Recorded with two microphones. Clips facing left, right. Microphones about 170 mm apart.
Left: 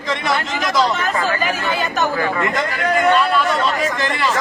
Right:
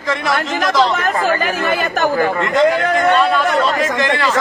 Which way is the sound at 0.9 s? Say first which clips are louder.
Right 3 dB; 55° right (ahead or behind).